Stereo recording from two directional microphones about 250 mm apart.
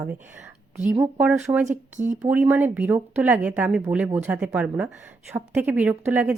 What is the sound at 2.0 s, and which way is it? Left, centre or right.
Speech, right.